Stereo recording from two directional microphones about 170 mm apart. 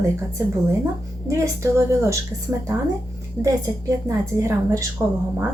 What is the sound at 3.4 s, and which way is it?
A woman's voice, 10° right (ahead or behind).